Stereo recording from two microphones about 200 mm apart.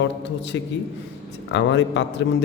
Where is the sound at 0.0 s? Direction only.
65° left (ahead or behind).